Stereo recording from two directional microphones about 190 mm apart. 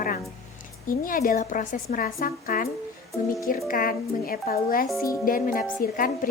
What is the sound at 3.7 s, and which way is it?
Speech, 50° left (ahead or behind).